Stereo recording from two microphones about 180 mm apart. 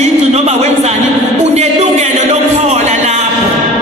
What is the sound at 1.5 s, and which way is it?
Music, 40° right (ahead or behind).